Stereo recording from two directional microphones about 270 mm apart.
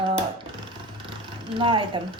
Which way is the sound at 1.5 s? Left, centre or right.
Centre.